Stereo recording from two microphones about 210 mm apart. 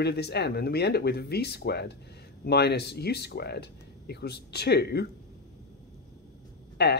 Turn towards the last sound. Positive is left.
turn(degrees=50)  # may be behind; listen again after turning